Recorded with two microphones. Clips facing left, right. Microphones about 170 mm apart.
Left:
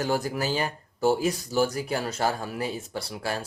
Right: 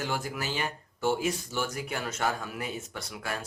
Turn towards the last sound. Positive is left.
turn(degrees=30)  # may be behind; listen again after turning